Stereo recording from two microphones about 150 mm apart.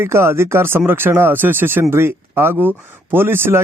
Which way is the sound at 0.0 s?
15° right (ahead or behind).